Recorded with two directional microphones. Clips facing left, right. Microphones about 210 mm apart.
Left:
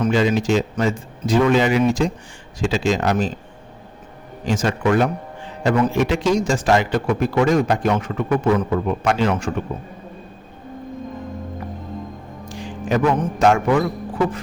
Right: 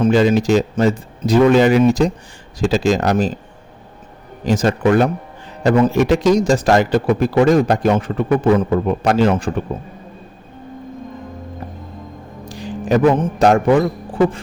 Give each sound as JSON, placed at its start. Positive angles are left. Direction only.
{"t": 0.0, "sound": "a man's voice", "side_deg": -40}
{"t": 4.4, "sound": "a man's voice", "side_deg": -40}
{"t": 12.5, "sound": "a man's voice", "side_deg": -35}